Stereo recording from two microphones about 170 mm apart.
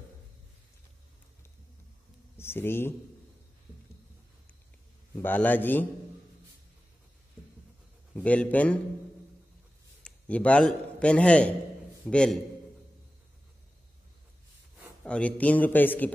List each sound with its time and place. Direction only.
2.3 s speech: 15° left (ahead or behind)
5.1 s speech: 10° left (ahead or behind)
8.1 s speech: 5° left (ahead or behind)
10.0 s a man's voice: 5° left (ahead or behind)
15.0 s speech: 5° left (ahead or behind)